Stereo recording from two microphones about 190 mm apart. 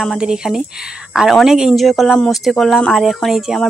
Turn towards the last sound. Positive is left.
turn(degrees=0)  # may be behind; listen again after turning